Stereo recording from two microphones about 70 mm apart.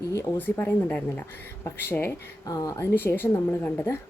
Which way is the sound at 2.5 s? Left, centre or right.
Left.